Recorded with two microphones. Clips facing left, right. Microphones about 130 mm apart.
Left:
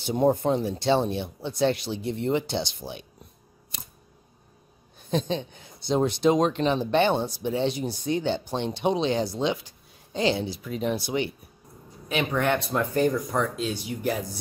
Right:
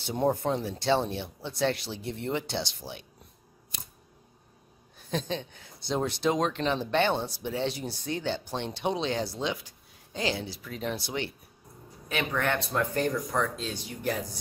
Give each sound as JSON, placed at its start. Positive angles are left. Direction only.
{"t": 0.0, "sound": "speech", "side_deg": 15}
{"t": 4.9, "sound": "speech", "side_deg": 20}